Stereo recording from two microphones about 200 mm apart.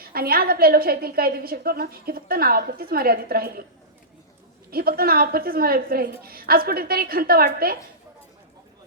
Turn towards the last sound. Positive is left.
turn(degrees=-50)  # may be behind; listen again after turning